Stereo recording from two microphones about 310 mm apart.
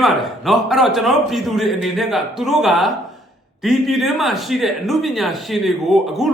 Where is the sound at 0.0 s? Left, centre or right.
Centre.